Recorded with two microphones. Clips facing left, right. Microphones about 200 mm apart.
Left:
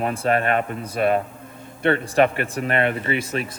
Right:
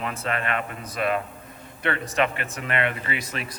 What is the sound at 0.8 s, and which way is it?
Speech, 30° left (ahead or behind).